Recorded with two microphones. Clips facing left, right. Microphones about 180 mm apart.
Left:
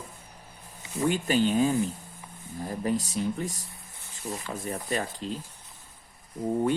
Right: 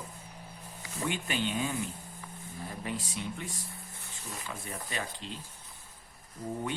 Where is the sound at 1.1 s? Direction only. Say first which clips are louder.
Left 9 dB; 40° left (ahead or behind).